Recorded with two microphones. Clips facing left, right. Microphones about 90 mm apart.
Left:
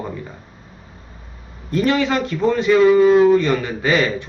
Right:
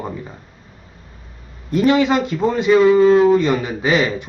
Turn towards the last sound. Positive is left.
turn(degrees=-15)  # may be behind; listen again after turning